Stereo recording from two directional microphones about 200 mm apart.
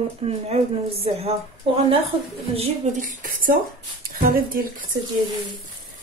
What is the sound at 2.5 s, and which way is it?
Speech, 40° right (ahead or behind).